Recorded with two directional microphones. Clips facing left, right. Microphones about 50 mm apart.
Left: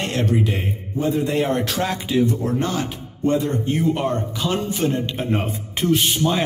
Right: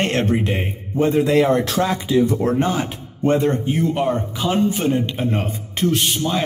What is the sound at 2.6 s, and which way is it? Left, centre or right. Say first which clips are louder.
Speech: right 2 dB; centre.